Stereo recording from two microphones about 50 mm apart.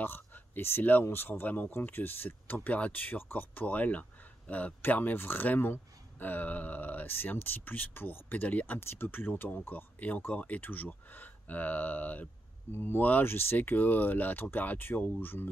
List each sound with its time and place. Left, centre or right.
0.0 s speech: left
1.4 s speech: left
8.7 s speech: left
12.7 s speech: left